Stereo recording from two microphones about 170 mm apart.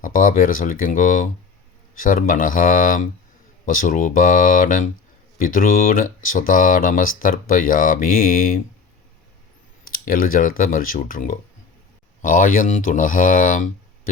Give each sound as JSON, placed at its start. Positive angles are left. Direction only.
{"t": 0.0, "sound": "speech", "side_deg": 50}
{"t": 9.8, "sound": "speech", "side_deg": 55}